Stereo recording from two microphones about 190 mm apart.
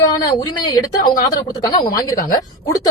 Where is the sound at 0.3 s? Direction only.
20° left (ahead or behind).